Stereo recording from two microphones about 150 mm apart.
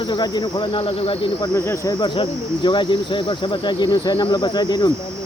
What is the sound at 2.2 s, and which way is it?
Speech, 30° left (ahead or behind).